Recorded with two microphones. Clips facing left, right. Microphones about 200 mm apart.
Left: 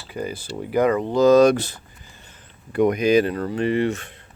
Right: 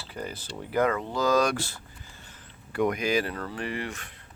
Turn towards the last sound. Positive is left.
turn(degrees=25)  # may be behind; listen again after turning